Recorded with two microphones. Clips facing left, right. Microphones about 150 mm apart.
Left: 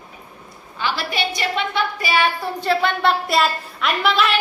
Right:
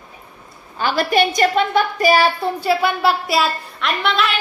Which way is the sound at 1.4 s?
45° right (ahead or behind).